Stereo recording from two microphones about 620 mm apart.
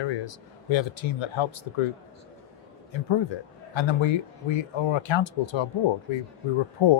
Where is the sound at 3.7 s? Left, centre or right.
Left.